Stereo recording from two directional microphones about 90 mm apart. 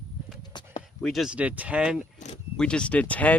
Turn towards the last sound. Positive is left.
turn(degrees=15)  # may be behind; listen again after turning